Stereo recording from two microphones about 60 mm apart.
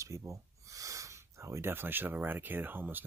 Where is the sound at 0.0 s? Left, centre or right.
Right.